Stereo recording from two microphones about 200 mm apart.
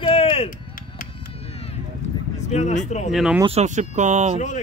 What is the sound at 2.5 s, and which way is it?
Speech, 35° left (ahead or behind).